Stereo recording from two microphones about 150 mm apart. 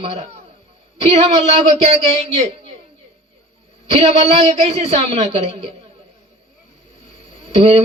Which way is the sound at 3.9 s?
45° right (ahead or behind).